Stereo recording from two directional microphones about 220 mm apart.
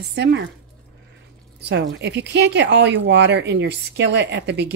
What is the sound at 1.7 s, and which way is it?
Speech, 50° right (ahead or behind).